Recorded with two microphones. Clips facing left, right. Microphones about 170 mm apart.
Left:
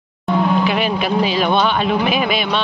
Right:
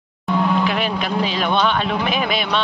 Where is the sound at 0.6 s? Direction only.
5° left (ahead or behind).